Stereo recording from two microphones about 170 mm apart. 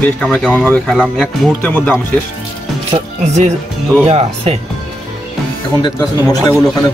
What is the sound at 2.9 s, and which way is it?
Music, 35° right (ahead or behind).